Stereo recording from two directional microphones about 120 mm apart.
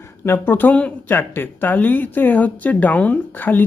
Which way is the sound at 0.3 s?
15° left (ahead or behind).